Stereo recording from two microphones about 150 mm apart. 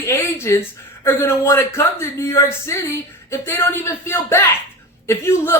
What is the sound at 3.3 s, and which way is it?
Speech, 15° left (ahead or behind).